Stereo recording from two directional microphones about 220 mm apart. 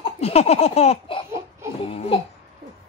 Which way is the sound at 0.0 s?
30° left (ahead or behind).